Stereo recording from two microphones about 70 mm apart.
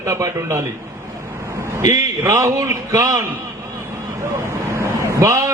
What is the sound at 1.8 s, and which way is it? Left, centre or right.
A man's voice, right.